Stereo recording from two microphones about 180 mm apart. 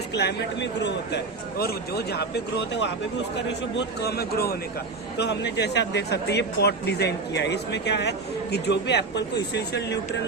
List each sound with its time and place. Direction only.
0.1 s speech: 70° left (ahead or behind)
3.8 s a man's voice: 65° left (ahead or behind)
5.1 s speech: 70° left (ahead or behind)